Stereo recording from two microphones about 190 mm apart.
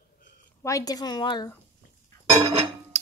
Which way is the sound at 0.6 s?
15° left (ahead or behind).